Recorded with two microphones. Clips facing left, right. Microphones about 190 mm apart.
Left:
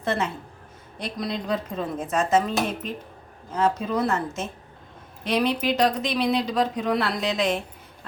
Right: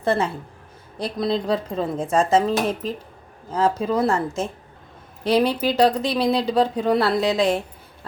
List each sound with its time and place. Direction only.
0.0 s a woman's voice: 30° right (ahead or behind)